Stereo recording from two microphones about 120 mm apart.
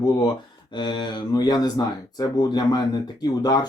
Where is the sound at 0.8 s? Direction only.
40° left (ahead or behind).